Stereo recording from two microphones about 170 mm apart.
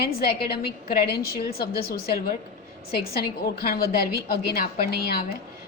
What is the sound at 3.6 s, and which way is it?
A woman's voice, 65° left (ahead or behind).